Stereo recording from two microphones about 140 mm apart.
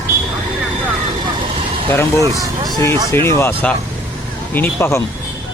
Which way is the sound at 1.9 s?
15° left (ahead or behind).